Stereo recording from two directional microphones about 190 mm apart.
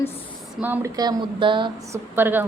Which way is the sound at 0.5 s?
10° right (ahead or behind).